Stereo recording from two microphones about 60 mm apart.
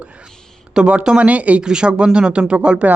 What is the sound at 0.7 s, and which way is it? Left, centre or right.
Speech, centre.